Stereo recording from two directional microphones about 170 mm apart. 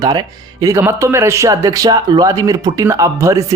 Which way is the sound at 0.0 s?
20° right (ahead or behind).